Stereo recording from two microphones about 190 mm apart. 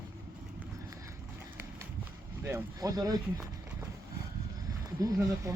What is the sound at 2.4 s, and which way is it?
Speech, 15° right (ahead or behind).